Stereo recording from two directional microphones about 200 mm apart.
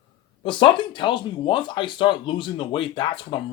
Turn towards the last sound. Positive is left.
turn(degrees=25)  # may be behind; listen again after turning